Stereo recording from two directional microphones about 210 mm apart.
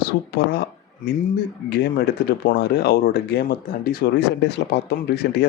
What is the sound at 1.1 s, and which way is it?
Speech, 45° left (ahead or behind).